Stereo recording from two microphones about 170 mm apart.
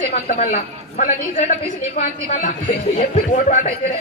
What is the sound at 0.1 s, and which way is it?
A man's voice, 45° left (ahead or behind).